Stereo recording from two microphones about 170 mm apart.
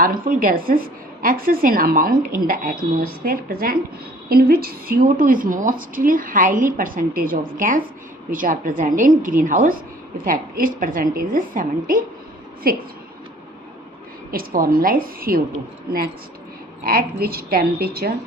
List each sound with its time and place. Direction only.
0.0 s a woman's voice: 55° right (ahead or behind)
14.3 s a woman's voice: 60° right (ahead or behind)
16.8 s a woman's voice: 60° right (ahead or behind)